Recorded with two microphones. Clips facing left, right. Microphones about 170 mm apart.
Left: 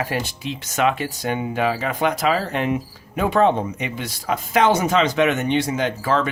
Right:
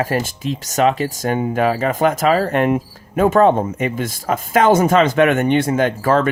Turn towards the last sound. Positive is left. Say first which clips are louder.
# right 5 dB
turn(degrees=-50)  # may be behind; listen again after turning